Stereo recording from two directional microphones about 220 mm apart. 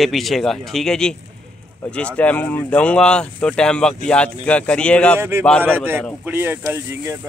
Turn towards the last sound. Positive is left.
turn(degrees=-10)  # may be behind; listen again after turning